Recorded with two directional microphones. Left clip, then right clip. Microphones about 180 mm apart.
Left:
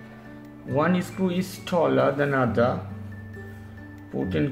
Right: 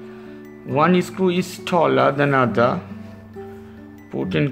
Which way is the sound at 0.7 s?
35° right (ahead or behind).